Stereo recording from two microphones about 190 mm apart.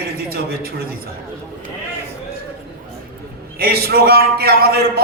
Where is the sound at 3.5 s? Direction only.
55° right (ahead or behind).